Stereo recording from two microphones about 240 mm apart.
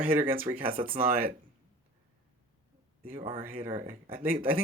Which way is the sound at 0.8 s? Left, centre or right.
Right.